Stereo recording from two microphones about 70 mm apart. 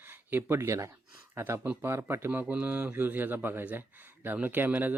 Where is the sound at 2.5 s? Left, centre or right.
Right.